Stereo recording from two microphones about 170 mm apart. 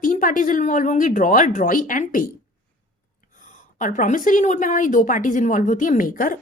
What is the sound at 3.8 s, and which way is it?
Speech, 50° left (ahead or behind).